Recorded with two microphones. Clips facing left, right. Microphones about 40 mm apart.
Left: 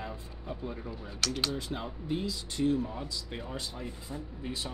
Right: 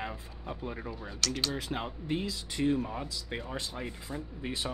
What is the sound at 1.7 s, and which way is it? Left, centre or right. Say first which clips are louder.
Speech: right 1 dB; right.